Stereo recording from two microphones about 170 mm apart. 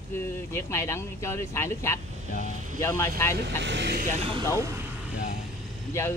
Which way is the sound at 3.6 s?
90° right.